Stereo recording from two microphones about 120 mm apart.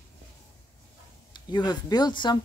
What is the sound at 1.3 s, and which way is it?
Speech, 35° left (ahead or behind).